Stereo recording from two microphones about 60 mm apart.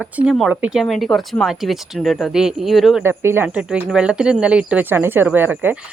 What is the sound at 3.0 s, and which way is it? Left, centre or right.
Speech, right.